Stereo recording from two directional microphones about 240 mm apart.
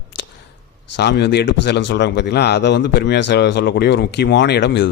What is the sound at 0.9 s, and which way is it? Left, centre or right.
A man's voice, left.